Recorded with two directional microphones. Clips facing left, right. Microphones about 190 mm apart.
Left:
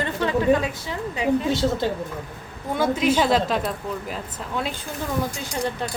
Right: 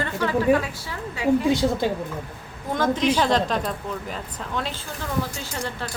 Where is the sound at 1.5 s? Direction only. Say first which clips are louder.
Right 1 dB; 15° right (ahead or behind).